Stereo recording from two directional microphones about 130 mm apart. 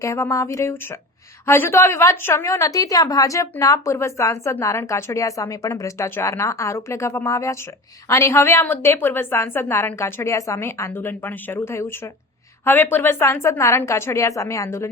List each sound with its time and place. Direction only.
0.0 s speech: 25° left (ahead or behind)